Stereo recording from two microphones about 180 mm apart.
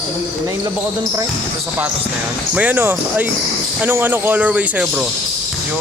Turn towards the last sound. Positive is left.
turn(degrees=-5)  # may be behind; listen again after turning